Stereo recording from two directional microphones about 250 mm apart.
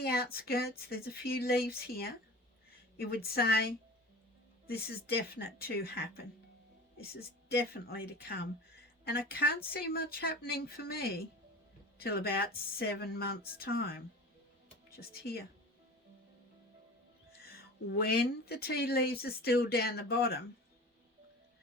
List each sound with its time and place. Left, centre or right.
0.0 s speech: left
17.3 s speech: left